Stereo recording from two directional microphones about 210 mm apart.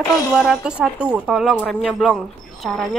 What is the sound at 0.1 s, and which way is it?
A woman's voice, centre (ahead or behind).